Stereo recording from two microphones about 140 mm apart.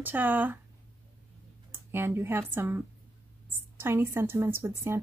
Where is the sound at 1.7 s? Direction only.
15° right (ahead or behind).